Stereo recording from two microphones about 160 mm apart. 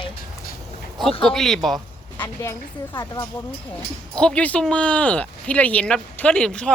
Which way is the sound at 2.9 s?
20° left (ahead or behind).